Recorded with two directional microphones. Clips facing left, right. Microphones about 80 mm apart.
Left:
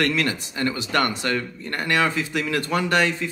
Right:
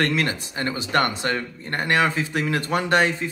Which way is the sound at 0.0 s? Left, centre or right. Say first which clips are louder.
Even; right.